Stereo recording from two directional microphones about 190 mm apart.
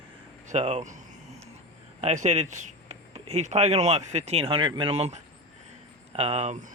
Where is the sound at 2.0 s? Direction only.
35° right (ahead or behind).